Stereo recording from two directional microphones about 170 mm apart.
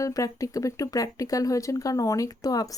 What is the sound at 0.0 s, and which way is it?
Speech, 20° left (ahead or behind).